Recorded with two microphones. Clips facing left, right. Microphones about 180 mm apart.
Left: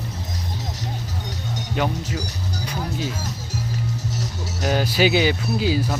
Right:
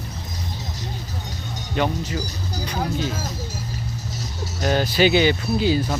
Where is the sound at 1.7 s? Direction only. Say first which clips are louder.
Right 2 dB; 5° left (ahead or behind).